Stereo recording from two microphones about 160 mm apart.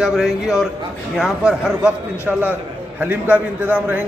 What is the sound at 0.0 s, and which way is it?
A man's voice, 5° right (ahead or behind).